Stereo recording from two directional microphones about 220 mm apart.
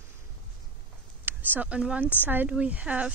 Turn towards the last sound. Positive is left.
turn(degrees=-5)  # may be behind; listen again after turning